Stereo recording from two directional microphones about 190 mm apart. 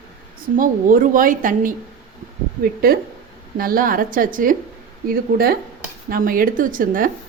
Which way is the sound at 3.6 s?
50° right (ahead or behind).